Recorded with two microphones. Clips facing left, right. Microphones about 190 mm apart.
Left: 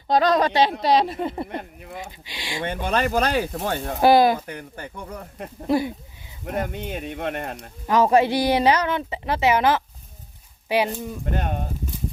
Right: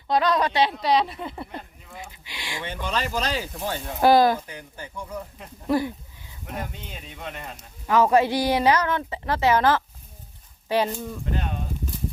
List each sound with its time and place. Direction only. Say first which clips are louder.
0.1 s speech: left 3 dB; 40° left (ahead or behind)
1.5 s speech: left 6 dB; 60° left (ahead or behind)
2.2 s speech: left 3 dB; 30° left (ahead or behind)
2.6 s speech: left 6 dB; 55° left (ahead or behind)
4.0 s speech: left 1 dB; 15° left (ahead or behind)
4.4 s speech: left 4 dB; 60° left (ahead or behind)
5.6 s speech: left 2 dB; 15° left (ahead or behind)
6.4 s speech: left 7 dB; 55° left (ahead or behind)
7.9 s a woman's voice: left 1 dB; 20° left (ahead or behind)
11.3 s speech: left 4 dB; 55° left (ahead or behind)